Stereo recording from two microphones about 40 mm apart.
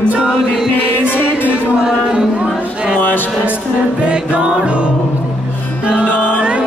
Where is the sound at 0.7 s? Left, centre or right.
Left.